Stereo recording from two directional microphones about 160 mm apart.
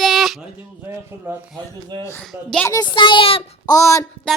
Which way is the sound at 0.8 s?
15° right (ahead or behind).